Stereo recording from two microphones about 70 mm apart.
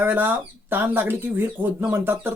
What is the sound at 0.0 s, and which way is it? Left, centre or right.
Speech, right.